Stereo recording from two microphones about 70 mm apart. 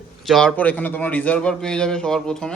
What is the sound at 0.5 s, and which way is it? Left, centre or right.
Speech, left.